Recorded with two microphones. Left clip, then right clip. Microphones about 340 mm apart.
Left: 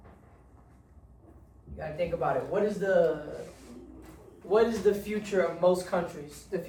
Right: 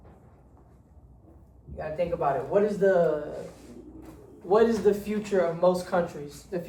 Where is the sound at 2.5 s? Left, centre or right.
Centre.